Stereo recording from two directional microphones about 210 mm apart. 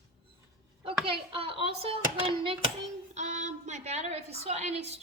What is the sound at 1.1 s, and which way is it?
A woman's voice, 25° right (ahead or behind).